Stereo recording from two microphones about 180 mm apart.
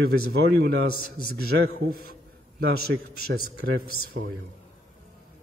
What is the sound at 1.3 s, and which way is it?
Speech, 60° right (ahead or behind).